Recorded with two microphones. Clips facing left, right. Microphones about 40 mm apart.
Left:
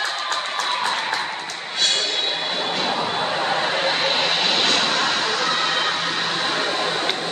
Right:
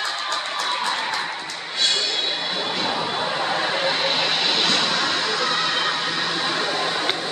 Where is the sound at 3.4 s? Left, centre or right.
Centre.